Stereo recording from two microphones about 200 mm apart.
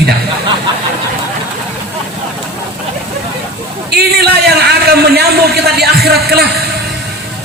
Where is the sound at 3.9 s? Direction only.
55° right (ahead or behind).